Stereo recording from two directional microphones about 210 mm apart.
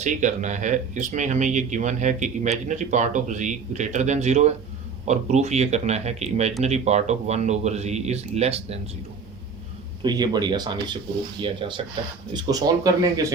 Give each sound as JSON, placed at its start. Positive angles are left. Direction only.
{"t": 0.0, "sound": "speech", "side_deg": -35}
{"t": 10.0, "sound": "speech", "side_deg": -20}